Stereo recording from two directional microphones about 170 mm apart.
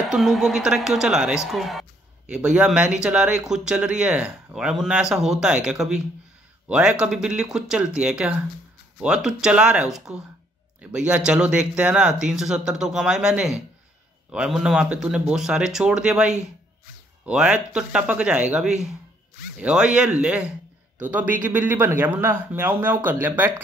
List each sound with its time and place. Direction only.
0.1 s speech: centre (ahead or behind)